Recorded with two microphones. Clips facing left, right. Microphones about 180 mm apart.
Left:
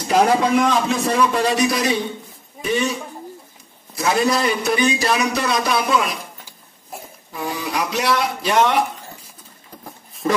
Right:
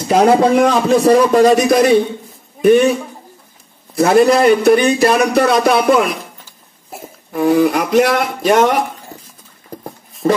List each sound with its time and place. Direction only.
0.1 s a man's voice: 40° right (ahead or behind)
7.3 s a man's voice: 55° right (ahead or behind)
10.2 s speech: 35° right (ahead or behind)